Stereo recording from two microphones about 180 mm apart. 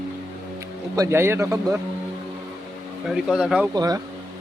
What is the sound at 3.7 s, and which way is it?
Speech, 20° right (ahead or behind).